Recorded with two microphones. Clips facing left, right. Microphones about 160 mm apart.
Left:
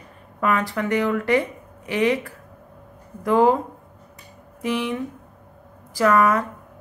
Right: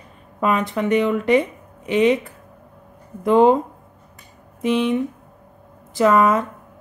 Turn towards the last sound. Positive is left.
turn(degrees=-20)  # may be behind; listen again after turning